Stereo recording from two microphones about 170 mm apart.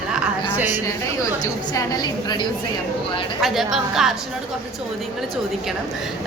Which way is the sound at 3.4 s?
Centre (ahead or behind).